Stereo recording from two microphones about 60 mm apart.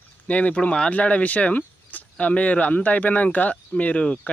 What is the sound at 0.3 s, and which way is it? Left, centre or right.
Speech, left.